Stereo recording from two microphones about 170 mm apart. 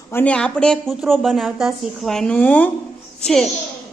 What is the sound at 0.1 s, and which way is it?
A child's voice, 10° left (ahead or behind).